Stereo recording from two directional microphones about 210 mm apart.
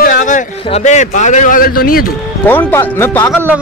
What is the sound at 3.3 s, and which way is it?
Speech, 5° right (ahead or behind).